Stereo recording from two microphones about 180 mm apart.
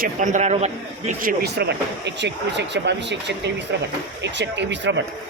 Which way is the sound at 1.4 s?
65° right (ahead or behind).